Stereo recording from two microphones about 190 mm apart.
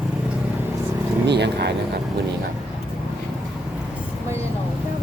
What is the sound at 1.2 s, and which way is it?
Speech, 60° right (ahead or behind).